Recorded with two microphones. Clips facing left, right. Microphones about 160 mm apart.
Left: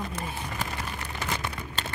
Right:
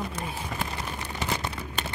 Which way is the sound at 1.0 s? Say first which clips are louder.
Right 3 dB; 20° right (ahead or behind).